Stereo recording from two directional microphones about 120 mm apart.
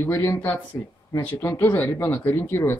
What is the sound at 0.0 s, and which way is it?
Speech, 20° left (ahead or behind).